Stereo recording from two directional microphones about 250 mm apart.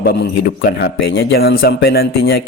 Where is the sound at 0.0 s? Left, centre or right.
Left.